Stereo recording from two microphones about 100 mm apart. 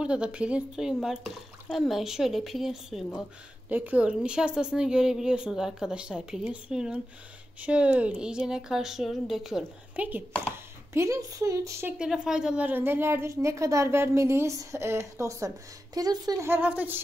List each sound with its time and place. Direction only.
0.0 s speech: 10° right (ahead or behind)
3.6 s a woman's voice: 15° right (ahead or behind); by 9.7 s centre (ahead or behind)
9.9 s a woman's voice: 15° right (ahead or behind)
10.9 s speech: 30° right (ahead or behind)
12.0 s a woman's voice: 5° right (ahead or behind); by 16.4 s 40° right (ahead or behind)
16.4 s a woman's voice: 15° right (ahead or behind)